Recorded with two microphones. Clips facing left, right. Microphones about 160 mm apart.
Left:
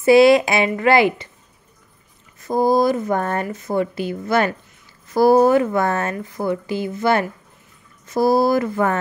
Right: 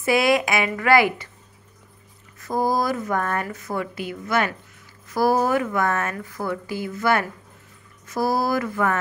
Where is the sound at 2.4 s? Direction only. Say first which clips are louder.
Left 6 dB; 20° left (ahead or behind).